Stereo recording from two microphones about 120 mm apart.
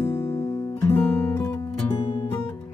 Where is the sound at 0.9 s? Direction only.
25° left (ahead or behind).